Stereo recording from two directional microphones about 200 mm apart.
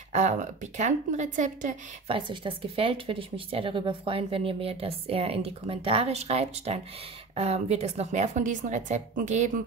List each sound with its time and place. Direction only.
0.1 s speech: 35° right (ahead or behind)
2.1 s speech: 25° right (ahead or behind)